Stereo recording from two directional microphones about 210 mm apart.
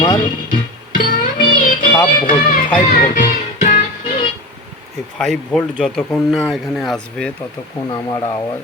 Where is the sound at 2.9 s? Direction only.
40° left (ahead or behind).